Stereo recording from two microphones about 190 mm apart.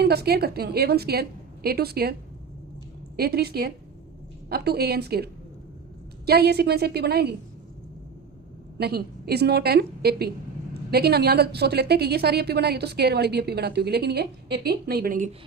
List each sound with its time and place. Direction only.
0.0 s a woman's voice: 55° right (ahead or behind)
3.2 s a woman's voice: 55° right (ahead or behind)
8.8 s a woman's voice: 55° right (ahead or behind)